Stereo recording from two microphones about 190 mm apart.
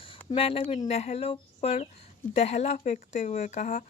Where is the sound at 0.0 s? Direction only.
30° left (ahead or behind).